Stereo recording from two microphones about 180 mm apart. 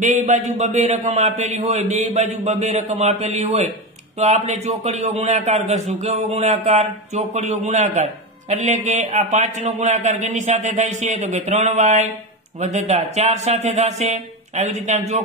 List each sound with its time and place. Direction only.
0.0 s a man's voice: 45° right (ahead or behind)